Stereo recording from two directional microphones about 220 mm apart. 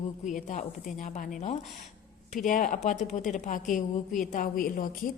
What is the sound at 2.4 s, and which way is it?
Speech, 35° left (ahead or behind).